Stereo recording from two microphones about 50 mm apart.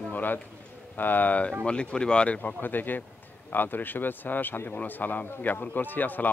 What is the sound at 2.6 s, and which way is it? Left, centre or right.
Speech, left.